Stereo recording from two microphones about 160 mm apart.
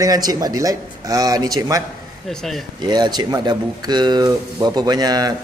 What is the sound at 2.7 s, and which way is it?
Speech, 25° right (ahead or behind).